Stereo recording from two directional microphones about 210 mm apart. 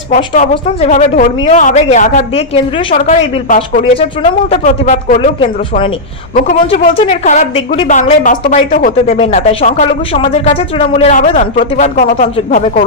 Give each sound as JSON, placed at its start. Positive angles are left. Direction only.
{"t": 0.1, "sound": "speech", "side_deg": 35}
{"t": 6.3, "sound": "speech", "side_deg": 40}